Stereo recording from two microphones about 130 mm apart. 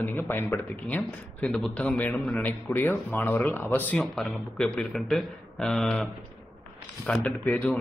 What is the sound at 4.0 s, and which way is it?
A man's voice, centre (ahead or behind).